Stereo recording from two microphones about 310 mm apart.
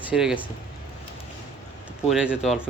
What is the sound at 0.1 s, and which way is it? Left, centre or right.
Speech, centre.